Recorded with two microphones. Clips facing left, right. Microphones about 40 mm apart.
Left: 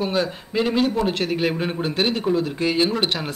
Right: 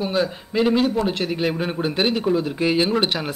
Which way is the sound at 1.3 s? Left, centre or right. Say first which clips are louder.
Even; centre.